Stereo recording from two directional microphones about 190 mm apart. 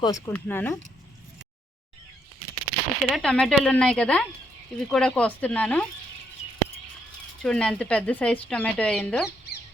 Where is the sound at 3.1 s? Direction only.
5° left (ahead or behind).